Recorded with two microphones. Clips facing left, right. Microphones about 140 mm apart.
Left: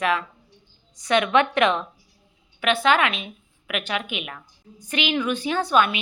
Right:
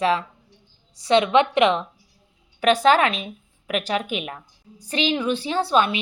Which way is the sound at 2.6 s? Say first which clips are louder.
Right 3 dB; 40° right (ahead or behind).